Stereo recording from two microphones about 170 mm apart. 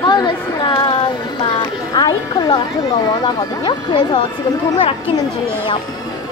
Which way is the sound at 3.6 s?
30° left (ahead or behind).